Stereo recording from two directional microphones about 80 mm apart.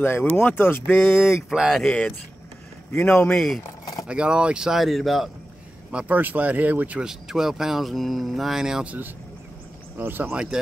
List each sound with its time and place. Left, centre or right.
0.0 s speech: left
1.5 s speech: centre
2.9 s speech: left
3.3 s speech: centre
4.1 s speech: centre
5.9 s speech: centre
7.0 s speech: centre
9.9 s speech: right
10.3 s speech: centre